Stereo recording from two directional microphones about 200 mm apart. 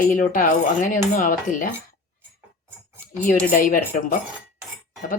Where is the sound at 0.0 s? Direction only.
40° left (ahead or behind).